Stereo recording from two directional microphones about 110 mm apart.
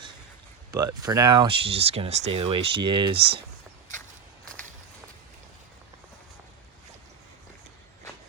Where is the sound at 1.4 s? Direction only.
60° right (ahead or behind).